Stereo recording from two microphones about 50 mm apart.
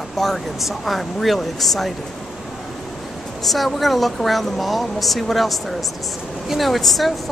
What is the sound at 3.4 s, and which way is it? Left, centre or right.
Speech, centre.